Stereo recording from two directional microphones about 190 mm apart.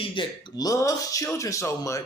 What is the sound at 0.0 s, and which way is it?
Speech, 25° left (ahead or behind).